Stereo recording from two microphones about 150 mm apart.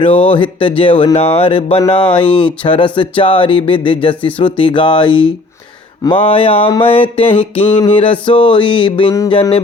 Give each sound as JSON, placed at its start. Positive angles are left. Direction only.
{"t": 0.0, "sound": "mantra", "side_deg": 40}